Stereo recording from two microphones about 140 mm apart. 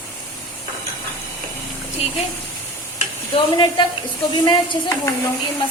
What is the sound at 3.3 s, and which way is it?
A woman's voice, 35° left (ahead or behind).